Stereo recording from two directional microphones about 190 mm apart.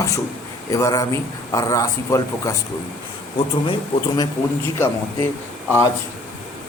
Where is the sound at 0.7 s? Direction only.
15° left (ahead or behind).